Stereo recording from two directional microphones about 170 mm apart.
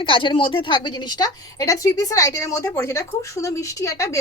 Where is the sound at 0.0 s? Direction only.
30° left (ahead or behind).